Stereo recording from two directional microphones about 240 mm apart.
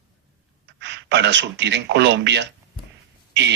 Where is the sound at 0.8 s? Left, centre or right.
Right.